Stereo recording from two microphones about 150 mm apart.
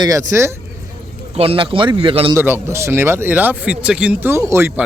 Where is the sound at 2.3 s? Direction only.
15° right (ahead or behind).